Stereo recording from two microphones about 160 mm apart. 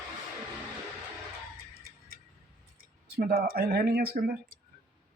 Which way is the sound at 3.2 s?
65° right (ahead or behind).